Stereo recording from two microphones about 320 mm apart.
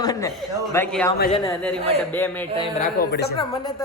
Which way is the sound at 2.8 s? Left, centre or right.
Left.